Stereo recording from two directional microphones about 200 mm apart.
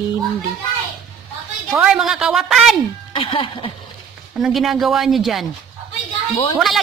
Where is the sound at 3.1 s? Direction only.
25° left (ahead or behind).